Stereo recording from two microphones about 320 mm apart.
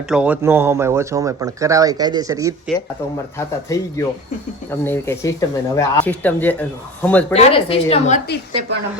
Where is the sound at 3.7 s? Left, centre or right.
Centre.